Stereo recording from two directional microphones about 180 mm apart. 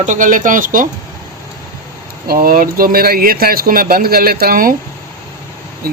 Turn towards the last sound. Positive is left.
turn(degrees=-50)  # may be behind; listen again after turning